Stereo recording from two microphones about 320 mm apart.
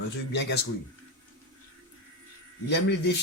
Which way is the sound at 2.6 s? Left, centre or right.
Left.